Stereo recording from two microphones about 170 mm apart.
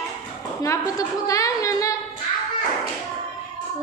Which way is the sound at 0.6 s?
20° left (ahead or behind).